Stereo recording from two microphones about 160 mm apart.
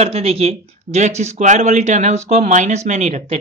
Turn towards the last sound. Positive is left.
turn(degrees=-45)  # may be behind; listen again after turning